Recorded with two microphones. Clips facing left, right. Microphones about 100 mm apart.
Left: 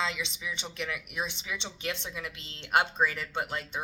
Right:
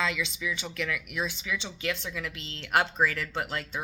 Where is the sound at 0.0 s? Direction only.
25° left (ahead or behind).